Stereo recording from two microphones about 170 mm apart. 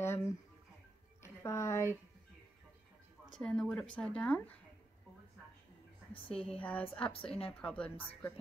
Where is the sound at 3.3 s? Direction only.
5° left (ahead or behind).